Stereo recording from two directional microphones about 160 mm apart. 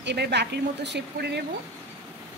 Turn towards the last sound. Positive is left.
turn(degrees=-90)